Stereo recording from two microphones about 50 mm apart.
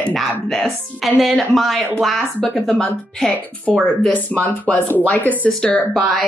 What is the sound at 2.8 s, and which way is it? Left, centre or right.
Speech, centre.